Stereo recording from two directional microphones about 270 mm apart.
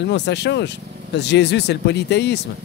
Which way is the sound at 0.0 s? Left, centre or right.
Left.